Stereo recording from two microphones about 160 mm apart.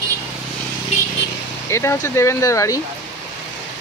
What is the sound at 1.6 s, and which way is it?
Speech, 15° left (ahead or behind).